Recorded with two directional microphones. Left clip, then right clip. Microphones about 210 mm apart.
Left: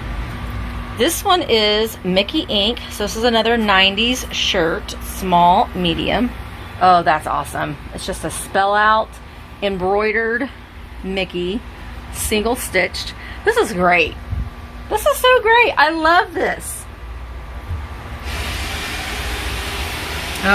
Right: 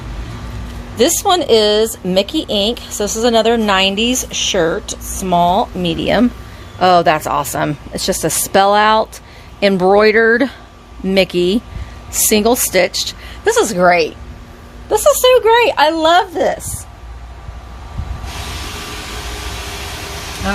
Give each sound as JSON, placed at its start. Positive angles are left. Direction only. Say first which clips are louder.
{"t": 0.9, "sound": "a woman's voice", "louder": "right 3 dB", "side_deg": -45}
{"t": 6.7, "sound": "a woman's voice", "louder": "right 2 dB", "side_deg": -55}